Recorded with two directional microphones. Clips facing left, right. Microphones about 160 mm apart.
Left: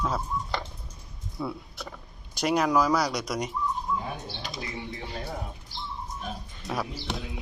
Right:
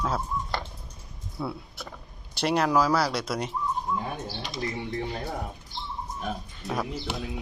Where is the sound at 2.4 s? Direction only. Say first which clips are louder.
Even; 10° left (ahead or behind).